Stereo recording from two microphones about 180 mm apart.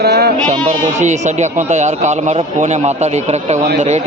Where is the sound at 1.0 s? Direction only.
40° right (ahead or behind).